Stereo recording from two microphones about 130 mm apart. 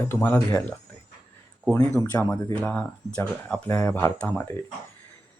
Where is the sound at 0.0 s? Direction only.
15° left (ahead or behind).